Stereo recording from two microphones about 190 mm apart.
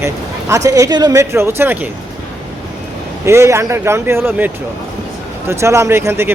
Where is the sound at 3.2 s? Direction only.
15° right (ahead or behind).